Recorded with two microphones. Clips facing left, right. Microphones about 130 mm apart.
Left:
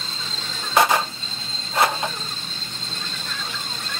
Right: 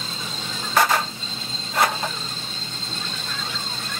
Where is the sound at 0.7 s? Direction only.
15° left (ahead or behind).